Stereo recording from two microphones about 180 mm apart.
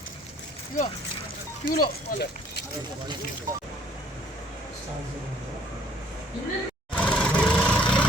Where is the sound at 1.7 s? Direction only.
50° left (ahead or behind).